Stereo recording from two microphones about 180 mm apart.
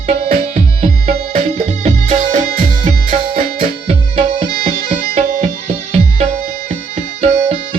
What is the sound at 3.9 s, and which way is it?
Music, 30° right (ahead or behind).